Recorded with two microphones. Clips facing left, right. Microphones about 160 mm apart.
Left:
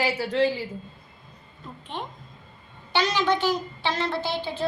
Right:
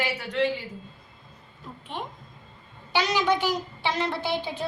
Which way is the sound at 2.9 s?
10° right (ahead or behind).